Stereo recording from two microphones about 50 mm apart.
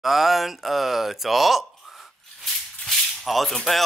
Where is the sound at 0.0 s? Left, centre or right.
Centre.